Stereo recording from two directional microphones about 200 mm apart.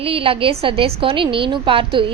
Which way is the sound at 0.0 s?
30° right (ahead or behind).